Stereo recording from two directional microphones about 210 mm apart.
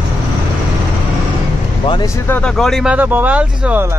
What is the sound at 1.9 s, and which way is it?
Speech, 15° left (ahead or behind).